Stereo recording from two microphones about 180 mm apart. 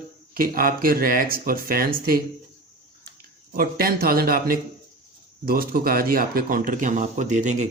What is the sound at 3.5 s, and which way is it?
A man's voice, 55° right (ahead or behind).